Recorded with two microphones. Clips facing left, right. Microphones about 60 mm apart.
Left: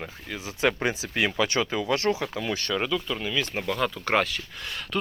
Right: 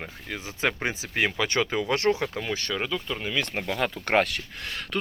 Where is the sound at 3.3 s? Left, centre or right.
Right.